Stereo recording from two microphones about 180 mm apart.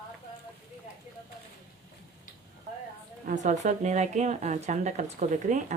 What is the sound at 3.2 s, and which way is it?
A woman's voice, 45° right (ahead or behind).